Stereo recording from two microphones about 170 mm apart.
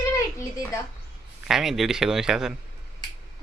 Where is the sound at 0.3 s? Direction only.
15° left (ahead or behind).